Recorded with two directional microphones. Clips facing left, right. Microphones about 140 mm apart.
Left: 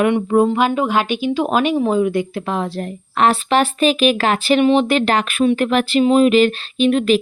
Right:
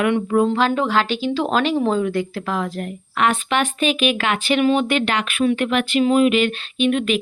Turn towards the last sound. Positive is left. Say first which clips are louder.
# left 4 dB
turn(degrees=35)  # may be behind; listen again after turning